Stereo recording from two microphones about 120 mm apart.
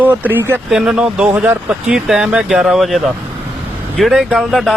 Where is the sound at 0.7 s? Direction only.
5° right (ahead or behind).